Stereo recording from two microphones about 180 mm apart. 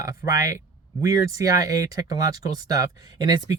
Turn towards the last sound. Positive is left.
turn(degrees=-20)  # may be behind; listen again after turning